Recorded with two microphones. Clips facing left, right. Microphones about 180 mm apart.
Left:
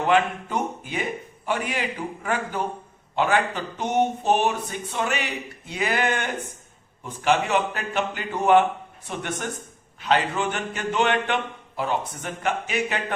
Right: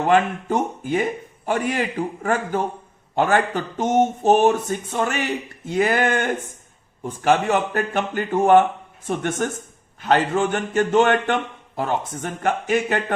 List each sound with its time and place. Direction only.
0.1 s speech: 45° right (ahead or behind)